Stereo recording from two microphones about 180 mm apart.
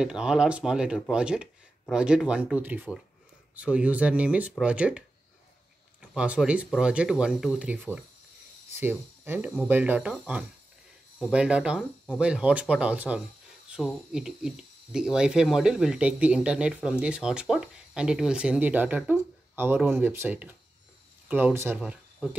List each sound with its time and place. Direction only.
0.0 s speech: 5° right (ahead or behind)